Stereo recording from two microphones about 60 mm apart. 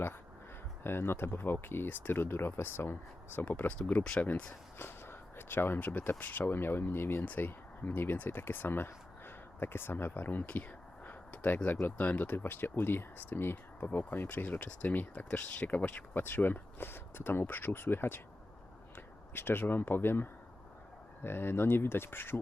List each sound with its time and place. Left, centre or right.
0.9 s speech: left
4.8 s speech: left
11.8 s speech: left
21.2 s speech: left